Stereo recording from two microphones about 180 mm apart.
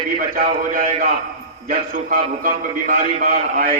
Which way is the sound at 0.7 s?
45° right (ahead or behind).